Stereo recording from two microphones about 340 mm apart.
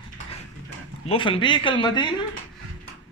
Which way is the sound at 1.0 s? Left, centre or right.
Centre.